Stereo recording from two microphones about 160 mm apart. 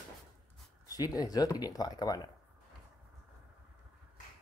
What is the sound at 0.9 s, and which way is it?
Speech, 25° left (ahead or behind).